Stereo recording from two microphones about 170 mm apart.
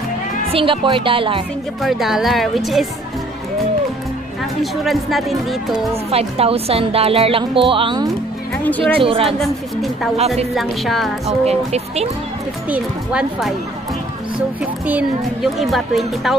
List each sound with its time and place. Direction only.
0.5 s speech: 30° right (ahead or behind)
1.8 s speech: centre (ahead or behind)
4.8 s speech: centre (ahead or behind)
6.0 s speech: 35° right (ahead or behind)
8.6 s speech: 10° left (ahead or behind)
9.0 s speech: 35° right (ahead or behind)
9.4 s speech: centre (ahead or behind)
11.4 s speech: 40° right (ahead or behind)
12.6 s speech: 5° right (ahead or behind)
14.9 s speech: 5° right (ahead or behind)